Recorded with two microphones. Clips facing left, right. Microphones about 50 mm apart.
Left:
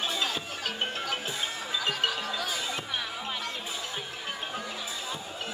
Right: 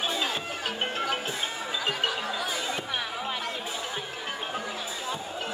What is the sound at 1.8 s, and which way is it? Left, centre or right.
Music, centre.